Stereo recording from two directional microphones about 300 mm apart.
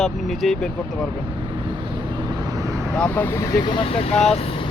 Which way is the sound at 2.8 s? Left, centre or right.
Centre.